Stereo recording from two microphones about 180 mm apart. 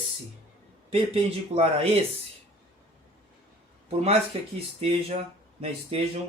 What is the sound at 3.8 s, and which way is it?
A man's voice, 35° right (ahead or behind).